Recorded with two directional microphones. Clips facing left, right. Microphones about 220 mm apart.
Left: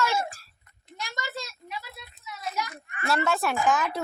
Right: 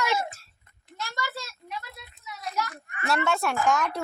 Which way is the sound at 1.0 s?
20° left (ahead or behind).